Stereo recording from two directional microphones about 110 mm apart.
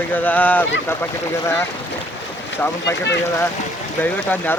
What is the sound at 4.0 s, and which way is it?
Speech, 15° left (ahead or behind).